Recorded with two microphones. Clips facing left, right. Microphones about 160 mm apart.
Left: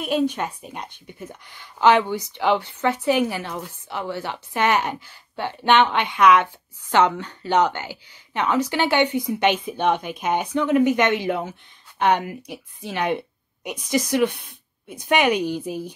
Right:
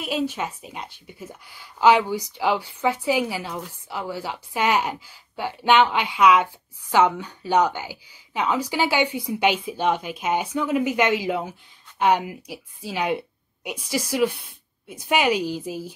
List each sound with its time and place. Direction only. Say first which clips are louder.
0.2 s speech: left 3 dB; 5° right (ahead or behind)
15.2 s a woman's voice: left 2 dB; 55° left (ahead or behind)